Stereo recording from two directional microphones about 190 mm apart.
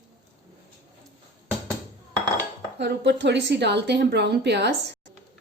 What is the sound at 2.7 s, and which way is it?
A woman's voice, 65° right (ahead or behind).